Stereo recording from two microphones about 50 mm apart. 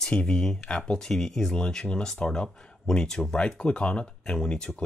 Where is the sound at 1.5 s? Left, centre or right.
Centre.